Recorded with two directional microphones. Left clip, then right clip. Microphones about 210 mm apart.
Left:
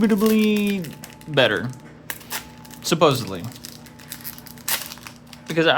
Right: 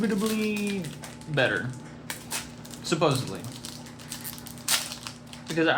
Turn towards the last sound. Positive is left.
turn(degrees=50)  # may be behind; listen again after turning